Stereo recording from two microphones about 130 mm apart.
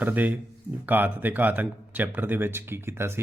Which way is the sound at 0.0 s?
15° right (ahead or behind).